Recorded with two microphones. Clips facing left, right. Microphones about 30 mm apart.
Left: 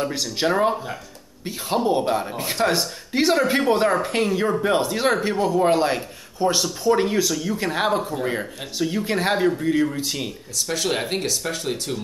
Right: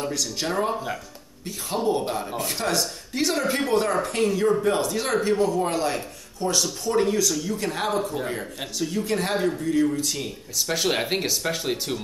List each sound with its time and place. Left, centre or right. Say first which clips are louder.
0.0 s speech: left 4 dB; left
2.0 s speech: left 4 dB; left
10.7 s speech: even; centre